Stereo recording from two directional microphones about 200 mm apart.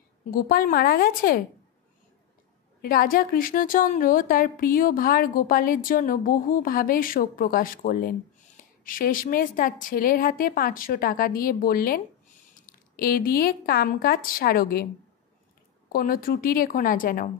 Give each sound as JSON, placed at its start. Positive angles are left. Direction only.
{"t": 0.3, "sound": "a woman's voice", "side_deg": 45}
{"t": 2.8, "sound": "a woman's voice", "side_deg": 45}
{"t": 15.9, "sound": "a woman's voice", "side_deg": 45}